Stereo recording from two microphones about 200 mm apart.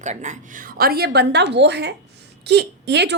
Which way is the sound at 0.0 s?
35° right (ahead or behind).